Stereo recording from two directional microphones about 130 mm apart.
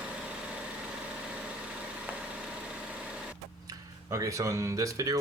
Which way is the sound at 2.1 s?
15° right (ahead or behind).